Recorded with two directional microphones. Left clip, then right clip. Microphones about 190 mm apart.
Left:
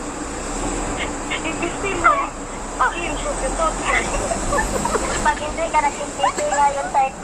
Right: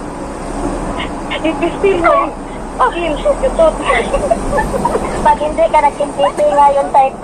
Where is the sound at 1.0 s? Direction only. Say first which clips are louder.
Right 6 dB; 30° right (ahead or behind).